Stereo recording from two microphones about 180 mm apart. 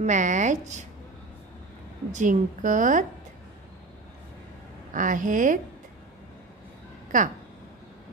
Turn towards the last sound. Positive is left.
turn(degrees=-45)  # may be behind; listen again after turning